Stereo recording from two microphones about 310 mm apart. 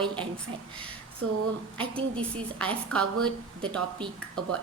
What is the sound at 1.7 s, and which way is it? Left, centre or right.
A woman's voice, centre.